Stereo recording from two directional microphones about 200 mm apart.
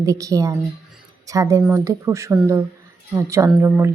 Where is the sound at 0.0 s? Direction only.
15° right (ahead or behind).